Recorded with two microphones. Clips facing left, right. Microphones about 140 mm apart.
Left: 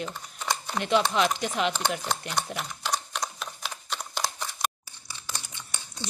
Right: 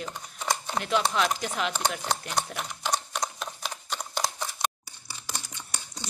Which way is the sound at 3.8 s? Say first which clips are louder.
Right 1 dB; 15° right (ahead or behind).